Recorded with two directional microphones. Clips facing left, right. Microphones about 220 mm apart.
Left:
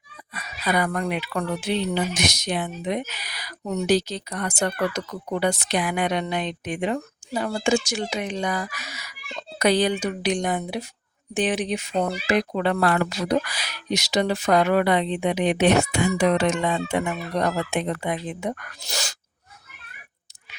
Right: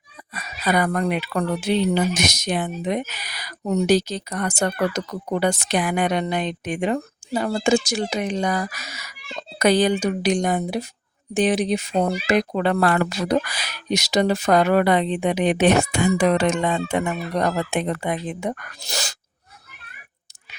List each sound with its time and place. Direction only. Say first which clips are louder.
0.3 s speech: right 3 dB; 45° right (ahead or behind)